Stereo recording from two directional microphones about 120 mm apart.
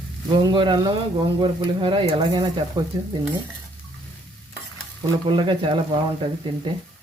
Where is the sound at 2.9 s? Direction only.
40° right (ahead or behind).